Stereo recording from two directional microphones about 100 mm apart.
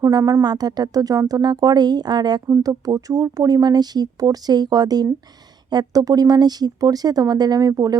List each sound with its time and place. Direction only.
0.0 s speech: 35° right (ahead or behind)